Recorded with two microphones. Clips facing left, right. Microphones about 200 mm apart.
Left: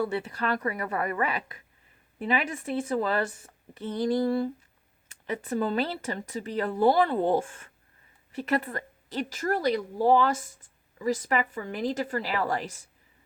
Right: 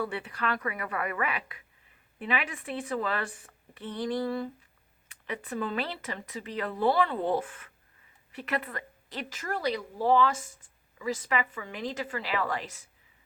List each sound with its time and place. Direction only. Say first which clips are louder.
0.1 s speech: left 4 dB; 40° left (ahead or behind)
8.3 s a woman's voice: left 5 dB; 45° left (ahead or behind)